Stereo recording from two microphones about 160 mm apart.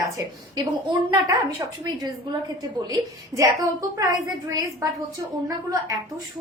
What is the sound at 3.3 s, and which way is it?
A woman's voice, 20° right (ahead or behind).